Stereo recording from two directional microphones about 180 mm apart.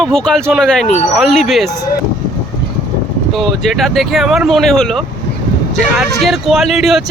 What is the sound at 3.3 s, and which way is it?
Speech, centre (ahead or behind).